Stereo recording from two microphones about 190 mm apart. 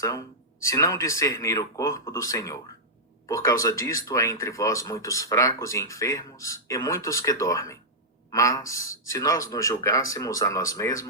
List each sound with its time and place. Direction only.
0.0 s speech: 15° left (ahead or behind)